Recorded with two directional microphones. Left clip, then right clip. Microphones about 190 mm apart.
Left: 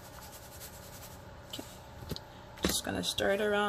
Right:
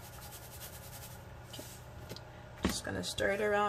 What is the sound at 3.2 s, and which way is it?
Speech, 10° left (ahead or behind).